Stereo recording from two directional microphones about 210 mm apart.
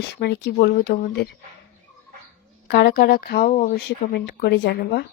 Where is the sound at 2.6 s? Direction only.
50° left (ahead or behind).